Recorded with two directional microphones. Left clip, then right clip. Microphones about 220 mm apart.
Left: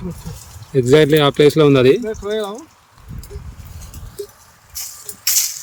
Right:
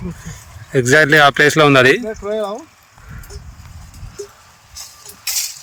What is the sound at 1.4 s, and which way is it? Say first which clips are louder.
Speech: right 1 dB; 5° left (ahead or behind).